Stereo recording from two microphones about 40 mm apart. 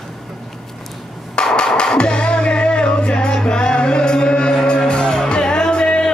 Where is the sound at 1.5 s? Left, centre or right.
Centre.